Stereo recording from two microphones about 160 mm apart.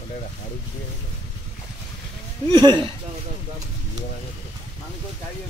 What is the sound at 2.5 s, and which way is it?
Speech, 25° right (ahead or behind).